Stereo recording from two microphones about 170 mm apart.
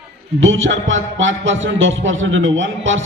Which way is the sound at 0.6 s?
90° right.